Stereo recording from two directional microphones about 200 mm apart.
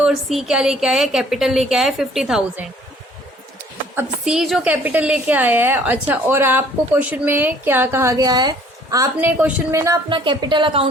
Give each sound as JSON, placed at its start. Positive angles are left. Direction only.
{"t": 0.0, "sound": "a woman's voice", "side_deg": 0}
{"t": 3.9, "sound": "a woman's voice", "side_deg": -5}